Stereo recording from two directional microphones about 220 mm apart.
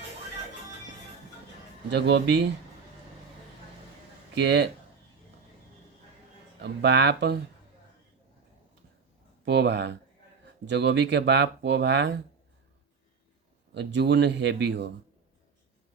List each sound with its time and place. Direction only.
1.9 s speech: 50° right (ahead or behind)
4.4 s speech: 50° right (ahead or behind)
6.6 s speech: 50° right (ahead or behind)
9.4 s speech: 50° right (ahead or behind)
13.7 s speech: 50° right (ahead or behind)